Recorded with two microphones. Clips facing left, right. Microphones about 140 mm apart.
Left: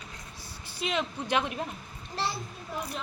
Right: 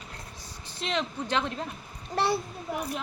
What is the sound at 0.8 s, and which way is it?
Speech, 5° left (ahead or behind).